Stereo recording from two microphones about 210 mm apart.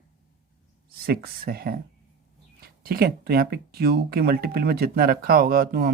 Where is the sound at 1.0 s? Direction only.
45° right (ahead or behind).